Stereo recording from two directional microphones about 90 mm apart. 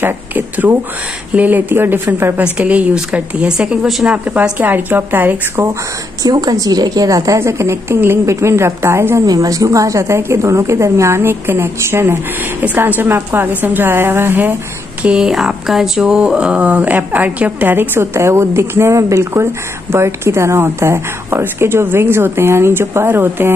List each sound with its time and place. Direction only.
0.0 s speech: 20° right (ahead or behind)
6.2 s speech: 45° right (ahead or behind)
9.2 s speech: 45° right (ahead or behind); by 14.5 s 25° right (ahead or behind)
15.0 s speech: 10° right (ahead or behind)